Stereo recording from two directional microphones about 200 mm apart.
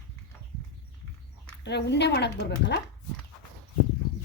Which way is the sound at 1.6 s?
60° left (ahead or behind).